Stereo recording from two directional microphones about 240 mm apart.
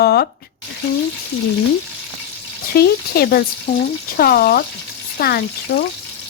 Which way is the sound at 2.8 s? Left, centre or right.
Left.